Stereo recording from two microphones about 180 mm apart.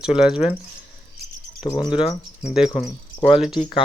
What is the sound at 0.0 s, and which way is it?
Speech, 5° right (ahead or behind).